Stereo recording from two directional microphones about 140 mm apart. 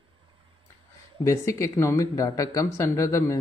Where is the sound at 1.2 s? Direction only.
20° left (ahead or behind).